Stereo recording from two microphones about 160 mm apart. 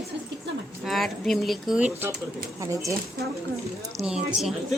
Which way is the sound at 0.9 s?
Centre (ahead or behind).